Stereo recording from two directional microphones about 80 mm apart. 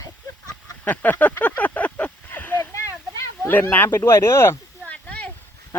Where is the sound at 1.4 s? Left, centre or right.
Left.